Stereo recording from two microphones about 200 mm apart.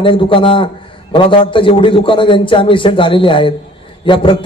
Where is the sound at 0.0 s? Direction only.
25° left (ahead or behind).